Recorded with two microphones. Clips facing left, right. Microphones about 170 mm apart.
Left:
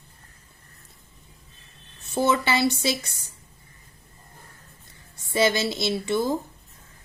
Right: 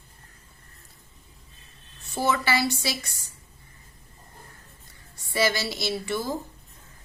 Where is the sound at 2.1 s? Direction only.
20° left (ahead or behind).